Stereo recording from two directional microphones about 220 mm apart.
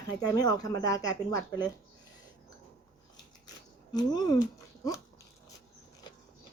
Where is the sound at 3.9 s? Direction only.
15° left (ahead or behind).